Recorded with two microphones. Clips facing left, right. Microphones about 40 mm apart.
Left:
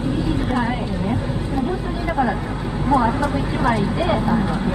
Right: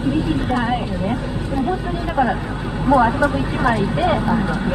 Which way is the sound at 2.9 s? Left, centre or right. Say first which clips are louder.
Right 3 dB; right.